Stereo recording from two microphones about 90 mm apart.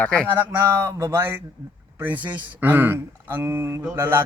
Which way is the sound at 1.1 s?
25° right (ahead or behind).